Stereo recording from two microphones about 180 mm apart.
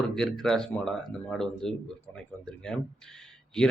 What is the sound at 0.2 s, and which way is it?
A man's voice, centre (ahead or behind).